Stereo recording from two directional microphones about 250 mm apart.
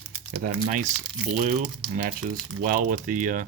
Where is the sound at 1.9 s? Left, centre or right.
Right.